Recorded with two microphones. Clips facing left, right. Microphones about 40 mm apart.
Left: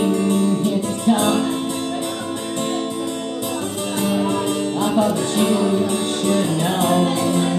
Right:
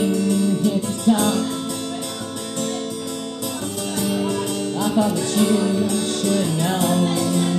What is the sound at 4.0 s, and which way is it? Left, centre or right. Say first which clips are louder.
Music: left 3 dB; left.